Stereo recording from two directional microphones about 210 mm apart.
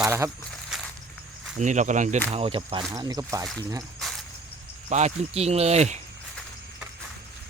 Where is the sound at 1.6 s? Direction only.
35° right (ahead or behind); by 3.5 s 15° right (ahead or behind).